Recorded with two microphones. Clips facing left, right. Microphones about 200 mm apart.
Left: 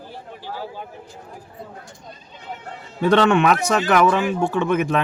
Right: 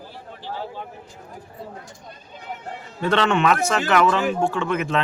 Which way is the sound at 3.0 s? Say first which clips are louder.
Left 4 dB; 15° left (ahead or behind).